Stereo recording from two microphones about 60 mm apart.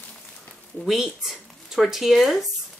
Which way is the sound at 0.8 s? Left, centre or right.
Centre.